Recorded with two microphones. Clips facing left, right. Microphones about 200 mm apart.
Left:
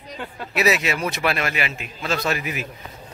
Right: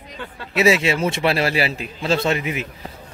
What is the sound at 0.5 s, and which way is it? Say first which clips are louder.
A man's voice: right 4 dB; 25° right (ahead or behind).